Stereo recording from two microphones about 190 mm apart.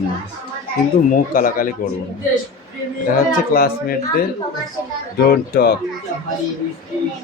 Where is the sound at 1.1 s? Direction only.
45° left (ahead or behind).